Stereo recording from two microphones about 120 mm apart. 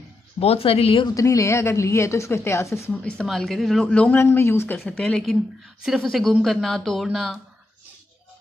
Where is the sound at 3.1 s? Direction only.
5° left (ahead or behind).